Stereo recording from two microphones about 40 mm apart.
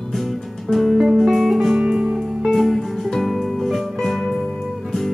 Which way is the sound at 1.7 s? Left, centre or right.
Centre.